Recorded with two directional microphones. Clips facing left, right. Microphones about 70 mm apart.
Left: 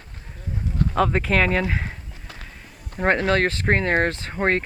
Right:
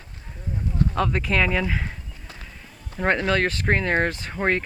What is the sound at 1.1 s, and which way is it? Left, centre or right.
Speech, centre.